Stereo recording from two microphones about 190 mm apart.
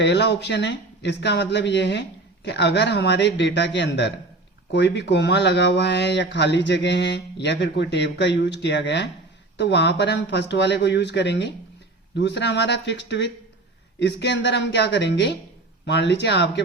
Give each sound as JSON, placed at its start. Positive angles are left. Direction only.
{"t": 0.0, "sound": "speech", "side_deg": 65}